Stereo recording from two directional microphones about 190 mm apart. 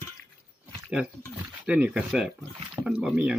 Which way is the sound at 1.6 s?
5° right (ahead or behind).